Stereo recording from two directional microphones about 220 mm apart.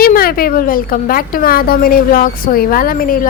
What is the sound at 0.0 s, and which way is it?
A woman's voice, 45° left (ahead or behind).